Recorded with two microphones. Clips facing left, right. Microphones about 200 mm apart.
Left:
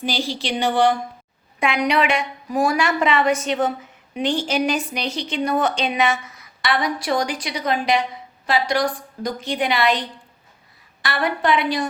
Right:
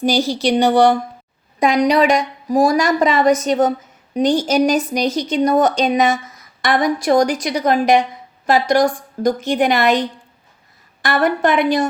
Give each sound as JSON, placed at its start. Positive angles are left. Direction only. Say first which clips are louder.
{"t": 0.0, "sound": "a woman's voice", "louder": "right 9 dB", "side_deg": -40}